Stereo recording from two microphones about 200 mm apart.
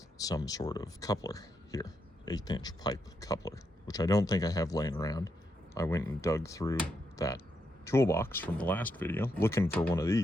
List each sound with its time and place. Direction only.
0.2 s speech: 20° left (ahead or behind)